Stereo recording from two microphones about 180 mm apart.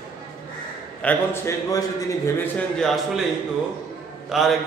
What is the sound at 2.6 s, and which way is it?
Speech, 5° left (ahead or behind).